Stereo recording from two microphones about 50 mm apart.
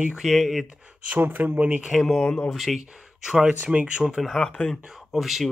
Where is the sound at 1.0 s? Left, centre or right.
Right.